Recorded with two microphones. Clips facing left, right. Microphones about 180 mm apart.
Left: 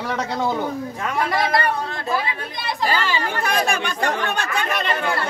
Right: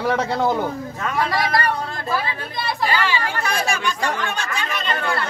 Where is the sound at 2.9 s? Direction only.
50° left (ahead or behind).